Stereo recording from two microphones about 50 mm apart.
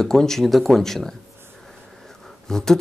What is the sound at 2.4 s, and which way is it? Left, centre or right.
Speech, centre.